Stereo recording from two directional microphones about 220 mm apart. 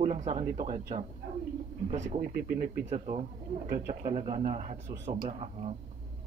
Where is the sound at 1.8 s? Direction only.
30° right (ahead or behind).